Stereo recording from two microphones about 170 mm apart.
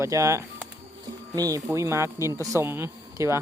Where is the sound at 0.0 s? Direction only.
15° right (ahead or behind).